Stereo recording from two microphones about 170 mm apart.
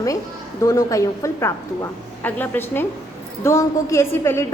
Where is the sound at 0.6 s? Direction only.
20° left (ahead or behind).